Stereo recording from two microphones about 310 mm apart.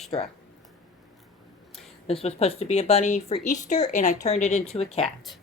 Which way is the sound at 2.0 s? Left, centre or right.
Centre.